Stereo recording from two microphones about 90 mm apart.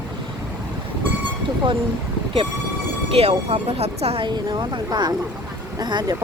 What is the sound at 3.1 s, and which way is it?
Speech, 90° right.